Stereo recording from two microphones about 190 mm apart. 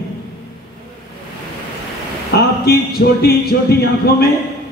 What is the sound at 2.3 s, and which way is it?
Speech, 55° left (ahead or behind).